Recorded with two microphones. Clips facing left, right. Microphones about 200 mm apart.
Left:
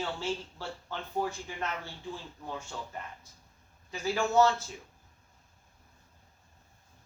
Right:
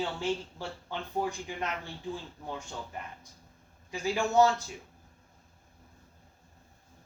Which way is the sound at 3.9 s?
15° right (ahead or behind).